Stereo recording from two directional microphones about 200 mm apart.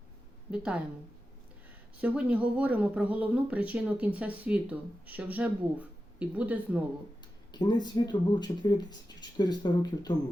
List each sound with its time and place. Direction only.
0.5 s a woman's voice: 5° right (ahead or behind)
2.0 s speech: 5° right (ahead or behind)
7.5 s speech: 20° left (ahead or behind)